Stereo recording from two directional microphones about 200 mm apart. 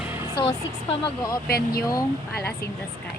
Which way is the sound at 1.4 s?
50° left (ahead or behind).